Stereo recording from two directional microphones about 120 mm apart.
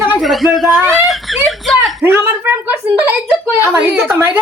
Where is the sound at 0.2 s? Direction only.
Centre (ahead or behind).